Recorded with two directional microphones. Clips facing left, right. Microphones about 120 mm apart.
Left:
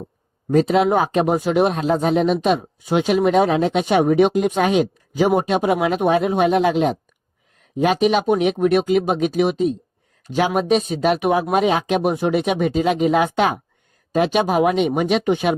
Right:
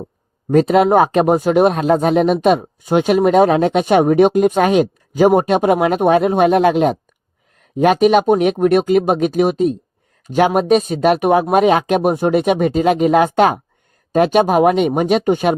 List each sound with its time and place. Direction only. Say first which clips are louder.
0.5 s speech: right 4 dB; 50° right (ahead or behind)